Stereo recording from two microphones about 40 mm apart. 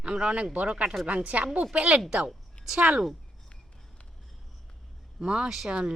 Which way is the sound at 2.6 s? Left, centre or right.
Left.